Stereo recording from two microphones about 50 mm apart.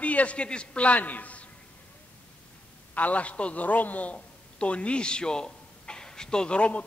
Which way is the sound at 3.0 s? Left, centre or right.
Left.